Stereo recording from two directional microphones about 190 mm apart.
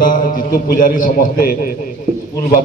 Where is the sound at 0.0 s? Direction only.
45° left (ahead or behind).